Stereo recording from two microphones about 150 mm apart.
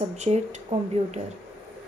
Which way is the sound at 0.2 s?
45° right (ahead or behind).